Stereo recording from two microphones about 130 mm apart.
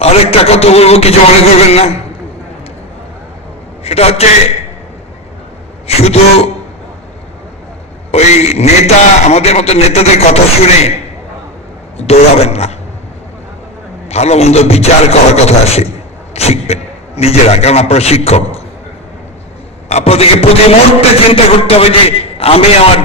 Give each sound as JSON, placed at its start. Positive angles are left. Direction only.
{"t": 0.0, "sound": "a man's voice", "side_deg": 50}
{"t": 3.8, "sound": "a man's voice", "side_deg": 50}
{"t": 6.0, "sound": "a man's voice", "side_deg": 55}
{"t": 8.1, "sound": "a man's voice", "side_deg": 55}
{"t": 11.9, "sound": "a man's voice", "side_deg": 55}
{"t": 14.1, "sound": "a man's voice", "side_deg": 55}
{"t": 19.9, "sound": "a man's voice", "side_deg": 55}